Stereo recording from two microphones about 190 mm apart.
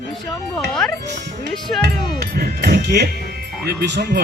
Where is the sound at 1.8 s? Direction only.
55° right (ahead or behind).